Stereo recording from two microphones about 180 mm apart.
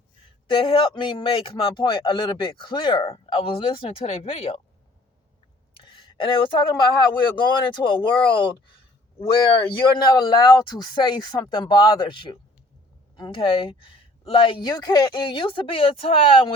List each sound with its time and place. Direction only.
0.5 s a man's voice: 25° left (ahead or behind)
5.7 s a man's voice: 25° left (ahead or behind)
9.2 s a man's voice: 25° left (ahead or behind)